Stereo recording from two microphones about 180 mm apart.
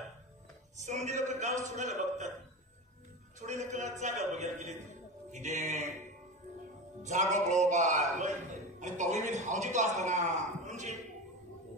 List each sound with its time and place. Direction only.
0.7 s a man's voice: 40° right (ahead or behind)
3.3 s a man's voice: 40° right (ahead or behind)
7.0 s a man's voice: 40° right (ahead or behind)